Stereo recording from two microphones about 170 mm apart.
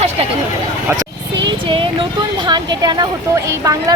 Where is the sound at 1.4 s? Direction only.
30° right (ahead or behind).